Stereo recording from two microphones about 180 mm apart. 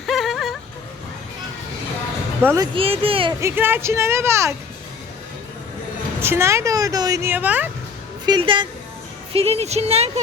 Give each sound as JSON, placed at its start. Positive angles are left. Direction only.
{"t": 0.1, "sound": "music", "side_deg": 0}
{"t": 2.4, "sound": "speech", "side_deg": -10}
{"t": 2.7, "sound": "speech", "side_deg": -30}
{"t": 3.4, "sound": "speech", "side_deg": -10}
{"t": 6.2, "sound": "speech", "side_deg": -15}
{"t": 8.3, "sound": "speech", "side_deg": -25}